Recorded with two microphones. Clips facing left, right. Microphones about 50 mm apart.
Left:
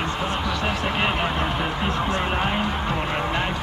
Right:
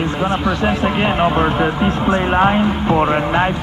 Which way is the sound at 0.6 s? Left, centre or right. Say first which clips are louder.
Right 5 dB; centre.